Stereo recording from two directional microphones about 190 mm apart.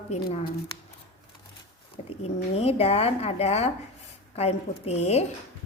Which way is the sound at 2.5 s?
30° left (ahead or behind).